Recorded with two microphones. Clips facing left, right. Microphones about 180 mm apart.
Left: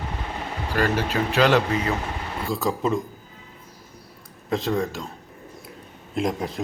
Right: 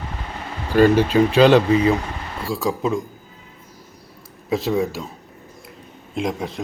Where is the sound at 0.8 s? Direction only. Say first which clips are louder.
Right 9 dB; 15° right (ahead or behind).